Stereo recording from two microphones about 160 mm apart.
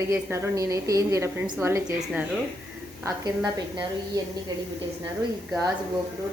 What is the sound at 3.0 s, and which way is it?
A woman's voice, 25° right (ahead or behind).